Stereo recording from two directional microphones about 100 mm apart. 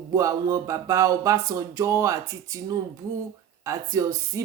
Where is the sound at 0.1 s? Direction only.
35° right (ahead or behind).